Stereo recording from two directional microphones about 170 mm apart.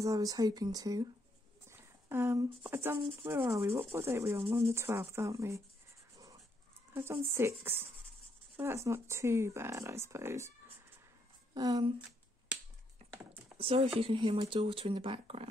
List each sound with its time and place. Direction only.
0.0 s speech: 20° right (ahead or behind)
1.7 s a sound: 15° right (ahead or behind)
2.7 s speech: 15° right (ahead or behind)
3.0 s speech: 30° right (ahead or behind)
3.3 s speech: 20° right (ahead or behind)
6.9 s speech: 15° right (ahead or behind)
13.0 s typing: 35° right (ahead or behind)
13.6 s speech: 35° right (ahead or behind)